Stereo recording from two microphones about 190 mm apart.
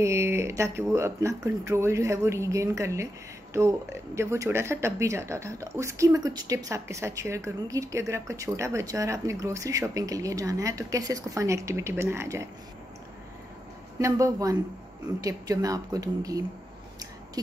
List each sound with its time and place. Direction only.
0.0 s speech: 15° right (ahead or behind)
13.9 s speech: 15° right (ahead or behind)